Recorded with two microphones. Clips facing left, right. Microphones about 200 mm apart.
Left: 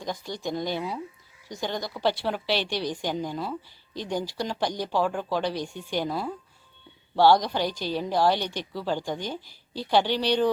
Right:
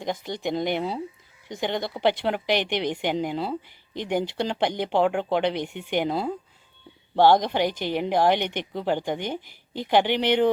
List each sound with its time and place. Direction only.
0.0 s a woman's voice: 20° right (ahead or behind)
4.4 s speech: 65° right (ahead or behind)
4.7 s a woman's voice: 20° right (ahead or behind)